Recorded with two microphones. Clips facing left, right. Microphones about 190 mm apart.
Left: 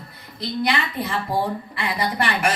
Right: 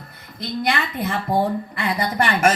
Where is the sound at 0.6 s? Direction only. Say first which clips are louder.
Right 1 dB; 50° right (ahead or behind).